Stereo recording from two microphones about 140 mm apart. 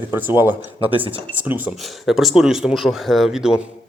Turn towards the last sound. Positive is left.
turn(degrees=-5)  # may be behind; listen again after turning